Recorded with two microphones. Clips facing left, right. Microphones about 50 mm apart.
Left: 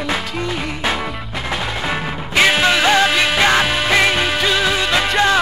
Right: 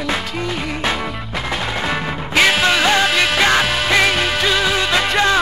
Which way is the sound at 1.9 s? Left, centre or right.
Centre.